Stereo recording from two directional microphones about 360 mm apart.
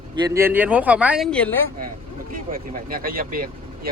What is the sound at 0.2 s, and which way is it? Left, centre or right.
Speech, centre.